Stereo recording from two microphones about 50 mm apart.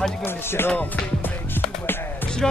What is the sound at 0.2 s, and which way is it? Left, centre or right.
Music, left.